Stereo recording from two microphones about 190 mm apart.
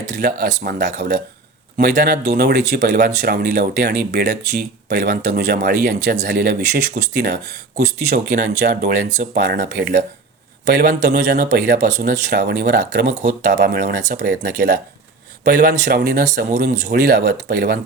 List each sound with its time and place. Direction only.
0.2 s speech: 55° right (ahead or behind)
8.1 s speech: 45° right (ahead or behind)
9.6 s speech: 55° right (ahead or behind)
15.4 s speech: 40° right (ahead or behind)
15.8 s speech: 55° right (ahead or behind)
16.2 s speech: 40° right (ahead or behind)